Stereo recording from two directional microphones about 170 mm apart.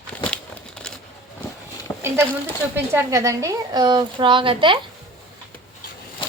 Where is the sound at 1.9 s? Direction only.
20° left (ahead or behind).